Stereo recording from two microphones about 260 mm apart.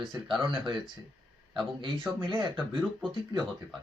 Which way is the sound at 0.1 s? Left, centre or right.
Centre.